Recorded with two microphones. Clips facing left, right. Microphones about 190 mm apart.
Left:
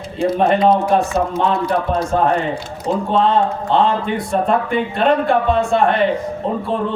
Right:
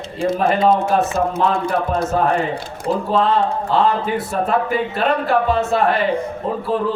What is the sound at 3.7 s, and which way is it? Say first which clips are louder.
A man's voice: left 1 dB; 5° right (ahead or behind).